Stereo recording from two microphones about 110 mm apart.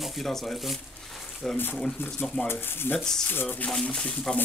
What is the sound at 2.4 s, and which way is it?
Speech, 20° left (ahead or behind).